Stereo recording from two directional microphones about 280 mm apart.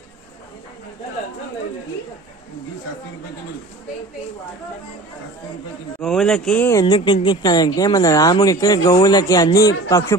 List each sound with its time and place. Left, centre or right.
5.9 s speech: centre